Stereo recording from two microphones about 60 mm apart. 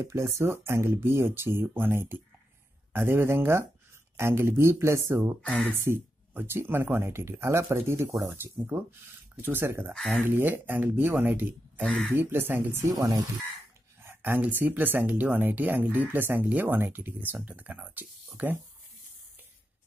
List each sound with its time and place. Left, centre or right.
0.0 s speech: right
9.9 s speech: centre
10.2 s speech: right
12.9 s speech: right
14.0 s a sound: right
14.4 s speech: right
18.4 s speech: right